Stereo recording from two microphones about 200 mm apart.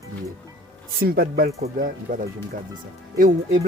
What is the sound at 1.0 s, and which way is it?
Speech, 50° right (ahead or behind).